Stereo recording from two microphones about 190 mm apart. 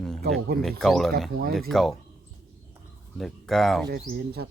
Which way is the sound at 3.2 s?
Centre (ahead or behind).